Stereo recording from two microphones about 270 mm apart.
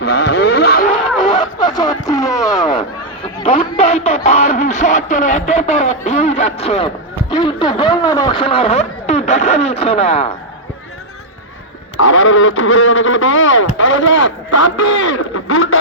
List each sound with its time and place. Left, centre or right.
0.0 s a sound: left
1.6 s music: centre
2.0 s speech: centre
11.9 s speech: left